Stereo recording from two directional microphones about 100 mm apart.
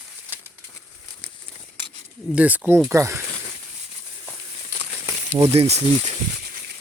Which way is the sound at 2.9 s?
30° right (ahead or behind).